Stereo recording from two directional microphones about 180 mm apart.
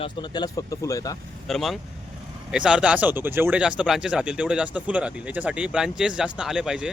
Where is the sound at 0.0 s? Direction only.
25° left (ahead or behind).